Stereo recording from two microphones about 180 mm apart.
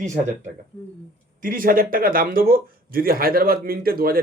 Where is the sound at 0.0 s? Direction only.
40° right (ahead or behind).